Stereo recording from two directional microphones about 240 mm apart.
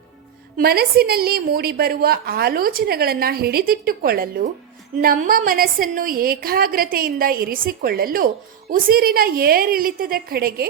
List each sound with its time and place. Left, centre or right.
0.5 s a woman's voice: right